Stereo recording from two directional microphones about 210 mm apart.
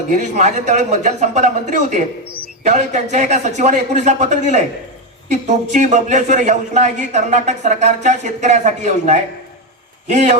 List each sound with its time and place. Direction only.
0.1 s a man's voice: 35° right (ahead or behind)
2.6 s a man's voice: 35° right (ahead or behind)